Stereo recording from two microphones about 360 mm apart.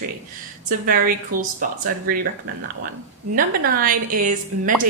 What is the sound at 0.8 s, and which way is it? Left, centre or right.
A woman's voice, right.